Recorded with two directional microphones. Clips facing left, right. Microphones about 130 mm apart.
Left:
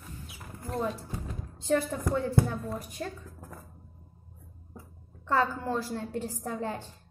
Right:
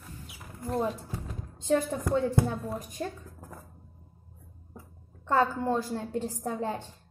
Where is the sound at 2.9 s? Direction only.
15° right (ahead or behind).